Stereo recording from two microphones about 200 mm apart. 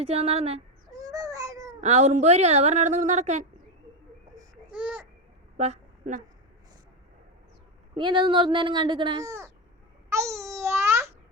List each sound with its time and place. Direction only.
0.0 s a woman's voice: 30° right (ahead or behind)
1.1 s baby cry: 15° right (ahead or behind)
1.8 s a woman's voice: 35° right (ahead or behind)
4.7 s babbling: 5° right (ahead or behind)
5.5 s a sound: 35° right (ahead or behind)
7.9 s speech: 25° right (ahead or behind)
10.1 s babbling: 15° right (ahead or behind)